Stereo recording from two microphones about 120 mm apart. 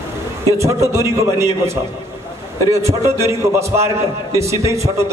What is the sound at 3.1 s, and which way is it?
A man's voice, 25° right (ahead or behind).